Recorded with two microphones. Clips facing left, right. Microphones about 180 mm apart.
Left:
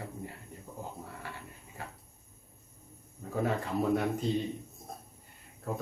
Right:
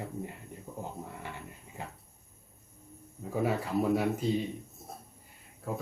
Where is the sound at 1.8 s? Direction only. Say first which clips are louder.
Right 2 dB; 20° right (ahead or behind).